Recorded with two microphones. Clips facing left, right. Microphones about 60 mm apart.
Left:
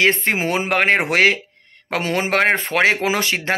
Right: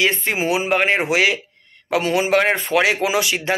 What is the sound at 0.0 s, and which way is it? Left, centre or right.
Speech, left.